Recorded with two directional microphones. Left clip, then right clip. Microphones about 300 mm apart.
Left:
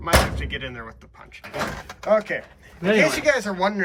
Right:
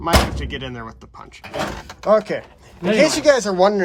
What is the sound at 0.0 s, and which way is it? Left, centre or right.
Speech, centre.